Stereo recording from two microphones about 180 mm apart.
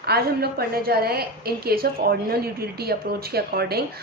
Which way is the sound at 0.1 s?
60° right (ahead or behind).